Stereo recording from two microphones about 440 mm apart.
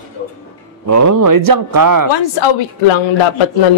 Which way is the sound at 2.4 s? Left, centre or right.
Left.